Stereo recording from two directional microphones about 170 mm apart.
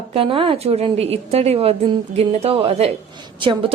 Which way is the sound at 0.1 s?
35° right (ahead or behind).